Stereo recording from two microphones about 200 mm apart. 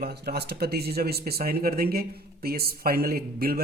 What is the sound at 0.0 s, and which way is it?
A man's voice, 50° right (ahead or behind).